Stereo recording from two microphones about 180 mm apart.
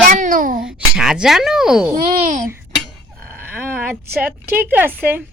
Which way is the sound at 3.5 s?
10° right (ahead or behind).